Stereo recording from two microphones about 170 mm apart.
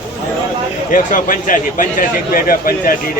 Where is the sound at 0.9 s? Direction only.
50° left (ahead or behind).